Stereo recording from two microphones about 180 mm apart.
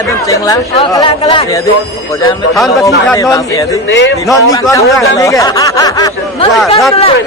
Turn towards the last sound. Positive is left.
turn(degrees=20)  # may be behind; listen again after turning